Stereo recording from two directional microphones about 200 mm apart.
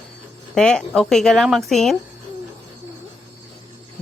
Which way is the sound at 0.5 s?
5° left (ahead or behind).